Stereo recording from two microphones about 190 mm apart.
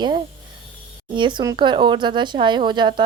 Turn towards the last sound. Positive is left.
turn(degrees=-25)  # may be behind; listen again after turning